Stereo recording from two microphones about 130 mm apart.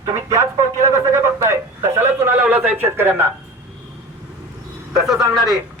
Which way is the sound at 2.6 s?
15° right (ahead or behind).